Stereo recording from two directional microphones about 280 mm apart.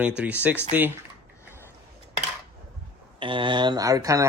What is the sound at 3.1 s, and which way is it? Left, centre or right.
Speech, centre.